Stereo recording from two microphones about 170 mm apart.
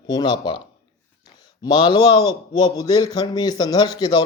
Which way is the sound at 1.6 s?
25° left (ahead or behind).